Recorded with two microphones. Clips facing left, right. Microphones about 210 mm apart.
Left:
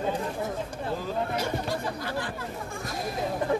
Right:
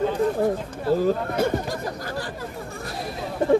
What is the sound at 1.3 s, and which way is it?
Chatter, 50° right (ahead or behind).